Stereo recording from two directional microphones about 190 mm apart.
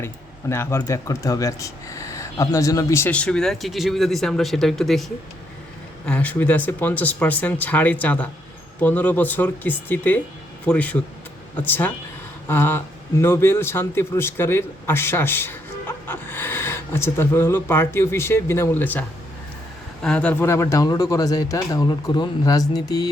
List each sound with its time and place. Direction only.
0.0 s speech: 15° left (ahead or behind)